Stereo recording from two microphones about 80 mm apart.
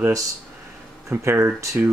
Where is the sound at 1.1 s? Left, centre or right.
Right.